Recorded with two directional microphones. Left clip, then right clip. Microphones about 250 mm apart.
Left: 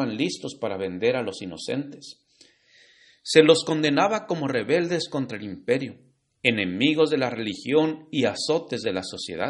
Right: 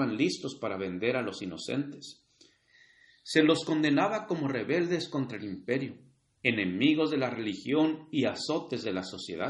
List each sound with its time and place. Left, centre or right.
0.0 s speech: left
3.3 s a man's voice: left